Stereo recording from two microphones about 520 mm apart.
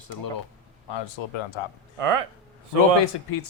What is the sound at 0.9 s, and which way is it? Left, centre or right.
Speech, left.